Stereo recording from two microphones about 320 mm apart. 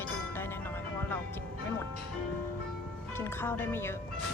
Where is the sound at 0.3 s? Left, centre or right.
Centre.